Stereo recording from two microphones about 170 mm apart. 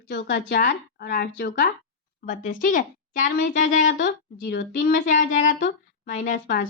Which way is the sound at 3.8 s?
80° left.